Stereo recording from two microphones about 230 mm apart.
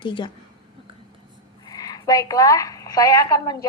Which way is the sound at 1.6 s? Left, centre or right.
Centre.